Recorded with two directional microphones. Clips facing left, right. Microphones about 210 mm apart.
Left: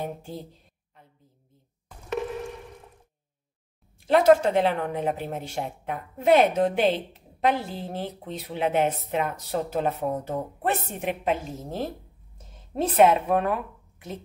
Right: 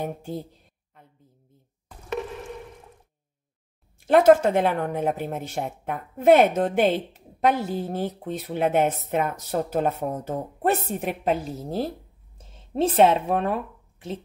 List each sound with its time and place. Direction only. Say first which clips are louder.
4.1 s a woman's voice: right 2 dB; 50° right (ahead or behind); by 14.2 s 30° right (ahead or behind)